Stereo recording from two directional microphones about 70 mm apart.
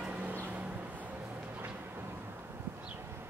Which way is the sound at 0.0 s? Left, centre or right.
Right.